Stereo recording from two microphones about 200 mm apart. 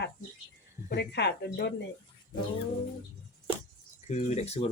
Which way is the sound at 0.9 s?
60° left (ahead or behind).